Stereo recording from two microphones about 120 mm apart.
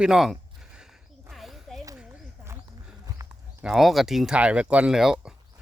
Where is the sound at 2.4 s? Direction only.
15° right (ahead or behind).